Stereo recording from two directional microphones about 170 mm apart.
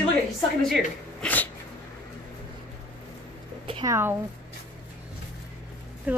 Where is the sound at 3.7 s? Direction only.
25° right (ahead or behind).